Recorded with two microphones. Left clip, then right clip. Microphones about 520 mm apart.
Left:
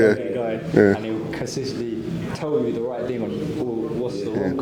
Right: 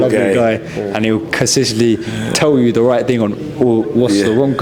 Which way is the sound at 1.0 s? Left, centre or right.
Right.